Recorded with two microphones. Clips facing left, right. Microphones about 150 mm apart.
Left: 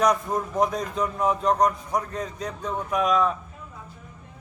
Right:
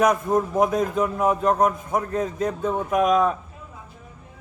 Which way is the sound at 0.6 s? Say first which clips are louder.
Right 4 dB; 50° right (ahead or behind).